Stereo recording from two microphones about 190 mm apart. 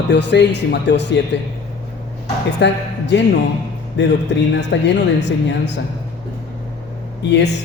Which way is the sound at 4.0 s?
75° left (ahead or behind).